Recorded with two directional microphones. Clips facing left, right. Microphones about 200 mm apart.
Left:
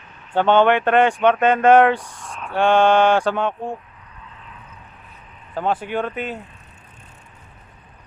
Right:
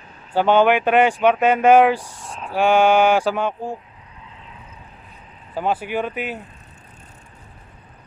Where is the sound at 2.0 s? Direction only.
30° right (ahead or behind).